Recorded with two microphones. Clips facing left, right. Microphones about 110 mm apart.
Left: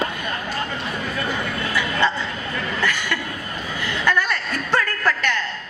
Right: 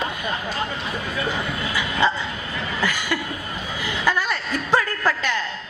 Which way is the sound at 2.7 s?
10° right (ahead or behind).